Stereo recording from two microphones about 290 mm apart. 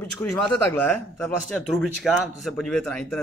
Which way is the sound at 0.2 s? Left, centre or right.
Centre.